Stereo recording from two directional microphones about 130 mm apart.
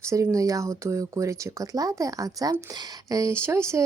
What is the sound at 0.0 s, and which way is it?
Speech, 25° right (ahead or behind).